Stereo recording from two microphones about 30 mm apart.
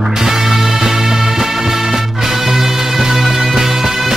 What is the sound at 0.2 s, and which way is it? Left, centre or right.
Music, centre.